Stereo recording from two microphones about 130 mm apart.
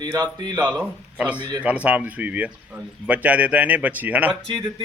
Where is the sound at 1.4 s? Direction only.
35° right (ahead or behind).